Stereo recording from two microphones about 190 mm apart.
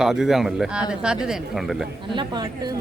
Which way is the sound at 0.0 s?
Centre (ahead or behind).